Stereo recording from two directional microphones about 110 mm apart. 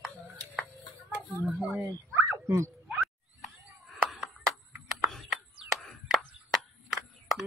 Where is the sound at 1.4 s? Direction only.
10° right (ahead or behind).